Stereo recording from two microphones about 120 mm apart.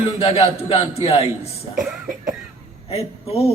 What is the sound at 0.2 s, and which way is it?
A man's voice, 60° left (ahead or behind).